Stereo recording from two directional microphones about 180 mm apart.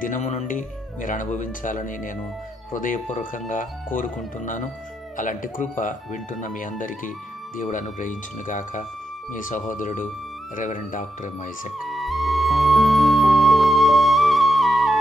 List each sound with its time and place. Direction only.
0.0 s speech: 45° left (ahead or behind)
5.1 s speech: 45° left (ahead or behind)
11.8 s music: centre (ahead or behind)